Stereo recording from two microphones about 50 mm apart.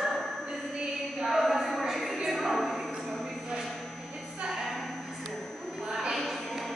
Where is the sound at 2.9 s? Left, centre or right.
Centre.